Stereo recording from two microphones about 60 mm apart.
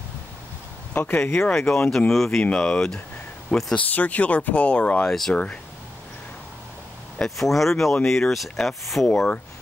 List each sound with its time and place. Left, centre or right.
0.9 s speech: left
1.9 s speech: centre
2.4 s speech: centre
3.7 s speech: left
7.2 s speech: centre
9.0 s speech: left